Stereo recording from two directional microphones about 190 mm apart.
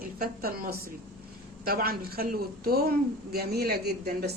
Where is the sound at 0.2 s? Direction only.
50° right (ahead or behind).